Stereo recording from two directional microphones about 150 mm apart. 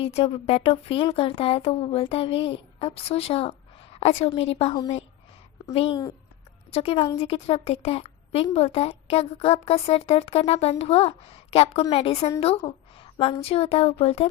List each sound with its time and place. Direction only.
0.0 s a woman's voice: 40° left (ahead or behind)